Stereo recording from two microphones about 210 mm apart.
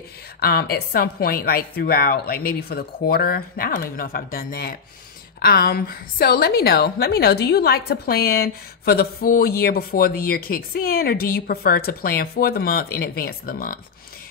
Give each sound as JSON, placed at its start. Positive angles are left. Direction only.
{"t": 0.4, "sound": "a woman's voice", "side_deg": 45}